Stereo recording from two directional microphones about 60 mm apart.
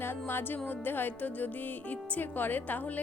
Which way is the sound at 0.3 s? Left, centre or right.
Left.